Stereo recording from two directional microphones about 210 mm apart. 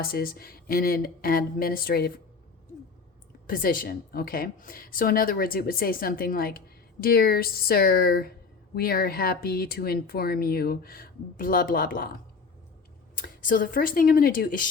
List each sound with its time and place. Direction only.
0.0 s speech: 45° left (ahead or behind)
3.4 s speech: 40° left (ahead or behind)
13.2 s speech: 40° left (ahead or behind)